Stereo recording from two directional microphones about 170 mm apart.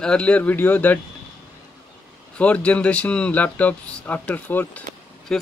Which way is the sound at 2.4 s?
5° left (ahead or behind).